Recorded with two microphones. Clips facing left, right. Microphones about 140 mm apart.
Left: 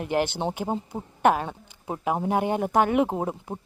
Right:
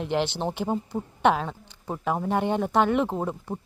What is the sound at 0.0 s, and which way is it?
Speech, 10° left (ahead or behind).